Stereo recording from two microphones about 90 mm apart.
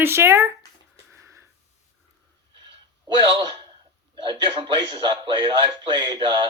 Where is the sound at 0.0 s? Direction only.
25° right (ahead or behind).